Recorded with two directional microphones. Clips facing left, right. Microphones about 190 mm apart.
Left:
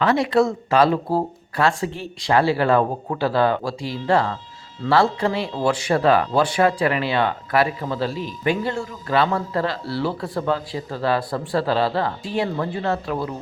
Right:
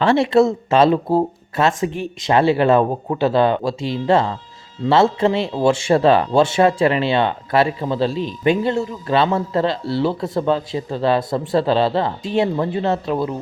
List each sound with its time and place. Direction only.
0.0 s speech: 25° right (ahead or behind)